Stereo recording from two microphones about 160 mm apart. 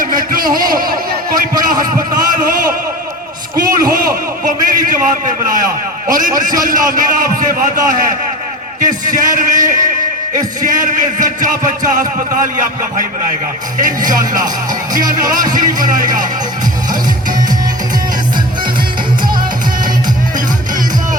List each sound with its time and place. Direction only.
0.0 s a sound: 60° right (ahead or behind)
3.5 s a man's voice: 60° right (ahead or behind)
13.7 s a man's voice: 55° right (ahead or behind)
15.5 s a man's voice: 60° right (ahead or behind)